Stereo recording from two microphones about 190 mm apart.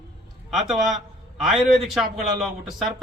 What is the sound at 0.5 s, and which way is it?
A man's voice, centre (ahead or behind).